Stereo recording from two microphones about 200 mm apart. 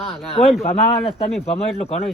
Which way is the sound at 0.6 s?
30° left (ahead or behind).